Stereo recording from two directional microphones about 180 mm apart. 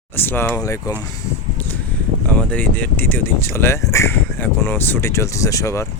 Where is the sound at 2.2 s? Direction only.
10° left (ahead or behind).